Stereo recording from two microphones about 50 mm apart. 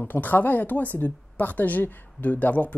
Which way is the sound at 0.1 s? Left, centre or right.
Left.